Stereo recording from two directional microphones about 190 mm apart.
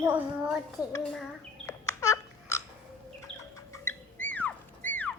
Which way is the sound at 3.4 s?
15° left (ahead or behind).